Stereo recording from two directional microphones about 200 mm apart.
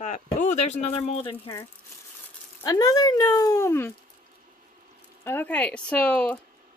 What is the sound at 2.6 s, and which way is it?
Speech, 20° left (ahead or behind).